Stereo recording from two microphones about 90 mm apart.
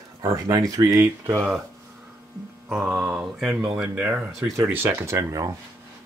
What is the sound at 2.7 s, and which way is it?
Speech, 5° right (ahead or behind).